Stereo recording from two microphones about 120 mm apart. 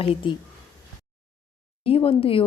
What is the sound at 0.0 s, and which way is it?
Speech, 50° left (ahead or behind).